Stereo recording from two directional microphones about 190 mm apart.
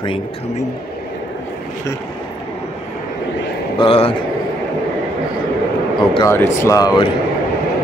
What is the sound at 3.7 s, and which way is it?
Speech, 30° left (ahead or behind).